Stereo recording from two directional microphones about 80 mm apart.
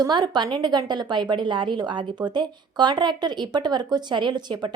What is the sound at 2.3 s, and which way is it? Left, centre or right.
A woman's voice, right.